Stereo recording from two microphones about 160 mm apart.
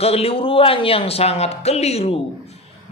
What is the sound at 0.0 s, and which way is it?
A man's voice, 40° left (ahead or behind).